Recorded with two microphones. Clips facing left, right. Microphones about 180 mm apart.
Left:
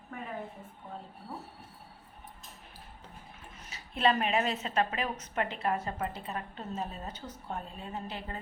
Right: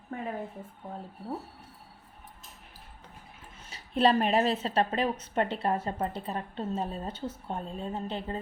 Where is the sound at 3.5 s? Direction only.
30° right (ahead or behind).